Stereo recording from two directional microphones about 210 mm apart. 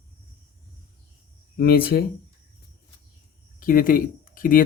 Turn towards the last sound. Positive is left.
turn(degrees=40)  # may be behind; listen again after turning